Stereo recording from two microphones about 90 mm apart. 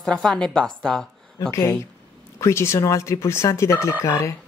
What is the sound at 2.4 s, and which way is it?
Speech, 30° left (ahead or behind).